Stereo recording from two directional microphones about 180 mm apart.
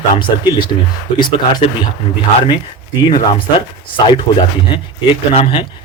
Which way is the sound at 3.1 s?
25° left (ahead or behind).